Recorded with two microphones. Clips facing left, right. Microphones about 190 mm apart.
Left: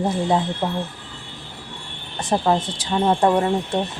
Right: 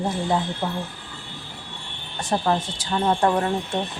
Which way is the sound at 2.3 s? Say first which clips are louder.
Left 3 dB; 20° left (ahead or behind).